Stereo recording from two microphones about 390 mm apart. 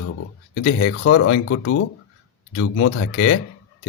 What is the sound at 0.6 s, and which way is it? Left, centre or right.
Speech, left.